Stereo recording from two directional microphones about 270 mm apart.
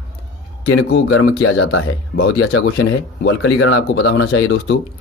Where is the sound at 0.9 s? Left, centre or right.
Left.